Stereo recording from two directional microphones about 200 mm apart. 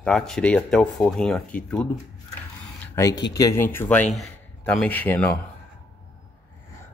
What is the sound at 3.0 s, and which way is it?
Speech, 15° left (ahead or behind).